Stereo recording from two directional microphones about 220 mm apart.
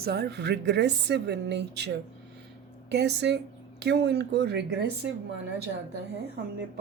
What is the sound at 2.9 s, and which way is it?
Speech, 50° right (ahead or behind).